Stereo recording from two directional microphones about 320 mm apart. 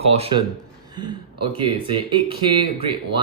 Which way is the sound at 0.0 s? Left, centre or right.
Centre.